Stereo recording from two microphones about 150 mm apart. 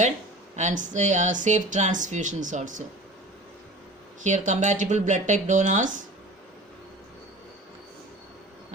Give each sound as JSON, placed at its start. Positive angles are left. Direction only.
{"t": 0.5, "sound": "speech", "side_deg": -55}
{"t": 4.2, "sound": "speech", "side_deg": -55}